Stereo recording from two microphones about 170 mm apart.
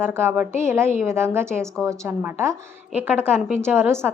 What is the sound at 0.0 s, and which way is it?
A woman's voice, 15° right (ahead or behind).